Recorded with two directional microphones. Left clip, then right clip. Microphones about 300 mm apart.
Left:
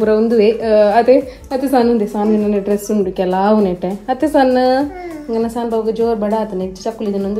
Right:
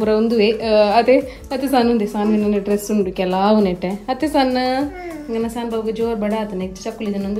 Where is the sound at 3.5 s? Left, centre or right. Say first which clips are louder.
Left 2 dB; centre.